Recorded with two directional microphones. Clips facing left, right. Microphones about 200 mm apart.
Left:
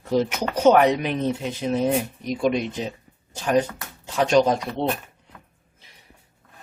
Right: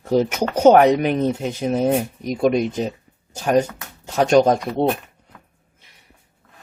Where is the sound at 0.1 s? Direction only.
45° right (ahead or behind).